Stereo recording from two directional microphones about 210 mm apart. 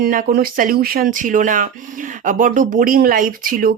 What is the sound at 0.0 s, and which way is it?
Speech, 40° right (ahead or behind).